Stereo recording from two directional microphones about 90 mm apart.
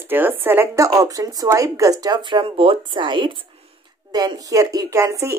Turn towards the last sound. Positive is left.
turn(degrees=-30)  # may be behind; listen again after turning